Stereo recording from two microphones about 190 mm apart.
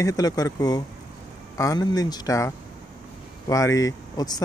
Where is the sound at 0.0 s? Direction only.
20° left (ahead or behind).